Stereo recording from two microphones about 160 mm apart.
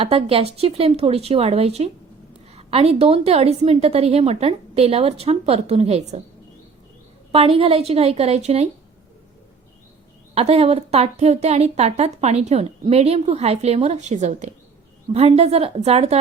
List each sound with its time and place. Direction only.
0.0 s a woman's voice: 35° right (ahead or behind)
7.3 s a woman's voice: 35° right (ahead or behind)
10.3 s a woman's voice: 40° right (ahead or behind)